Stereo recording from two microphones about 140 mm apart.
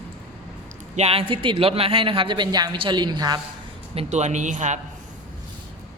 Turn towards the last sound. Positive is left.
turn(degrees=-60)  # may be behind; listen again after turning